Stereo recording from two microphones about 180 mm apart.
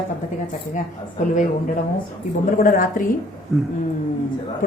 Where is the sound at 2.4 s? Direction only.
50° left (ahead or behind).